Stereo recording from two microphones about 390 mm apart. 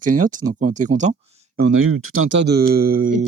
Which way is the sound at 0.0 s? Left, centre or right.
Centre.